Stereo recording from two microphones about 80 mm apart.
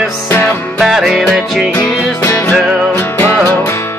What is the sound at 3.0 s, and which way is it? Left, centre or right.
Music, left.